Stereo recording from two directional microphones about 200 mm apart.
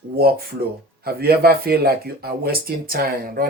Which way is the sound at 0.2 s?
50° right (ahead or behind).